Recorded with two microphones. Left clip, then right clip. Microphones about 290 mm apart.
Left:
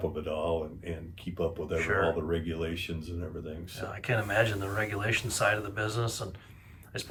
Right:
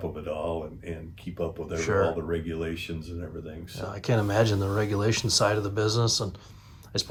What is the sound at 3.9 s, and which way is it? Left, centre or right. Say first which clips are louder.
Speech: right 3 dB; centre.